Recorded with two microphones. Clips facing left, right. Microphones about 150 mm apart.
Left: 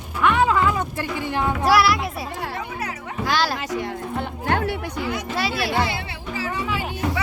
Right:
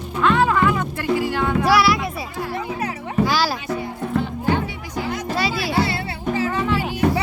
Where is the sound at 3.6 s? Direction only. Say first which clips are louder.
Right 1 dB; 90° left.